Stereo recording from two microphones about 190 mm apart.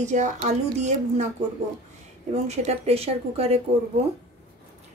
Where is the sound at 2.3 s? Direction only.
35° right (ahead or behind).